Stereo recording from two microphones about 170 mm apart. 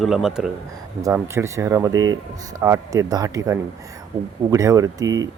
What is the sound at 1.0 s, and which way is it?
Speech, 15° right (ahead or behind).